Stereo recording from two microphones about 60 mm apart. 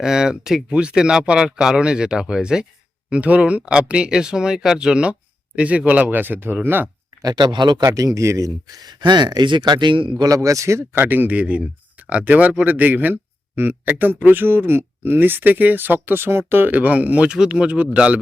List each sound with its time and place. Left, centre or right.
0.0 s speech: centre
3.1 s speech: right
7.2 s speech: right
10.2 s speech: right
10.9 s speech: right